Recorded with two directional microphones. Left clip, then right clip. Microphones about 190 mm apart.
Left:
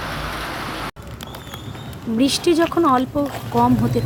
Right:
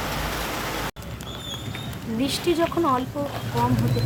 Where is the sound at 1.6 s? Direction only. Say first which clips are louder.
Right 1 dB; 5° right (ahead or behind).